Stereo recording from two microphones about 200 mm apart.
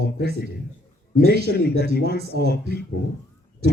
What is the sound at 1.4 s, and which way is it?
A man's voice, 55° left (ahead or behind).